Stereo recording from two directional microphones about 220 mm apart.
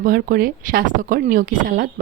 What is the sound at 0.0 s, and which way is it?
Speech, 40° right (ahead or behind).